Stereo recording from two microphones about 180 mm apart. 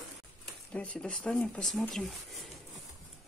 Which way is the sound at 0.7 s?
5° left (ahead or behind).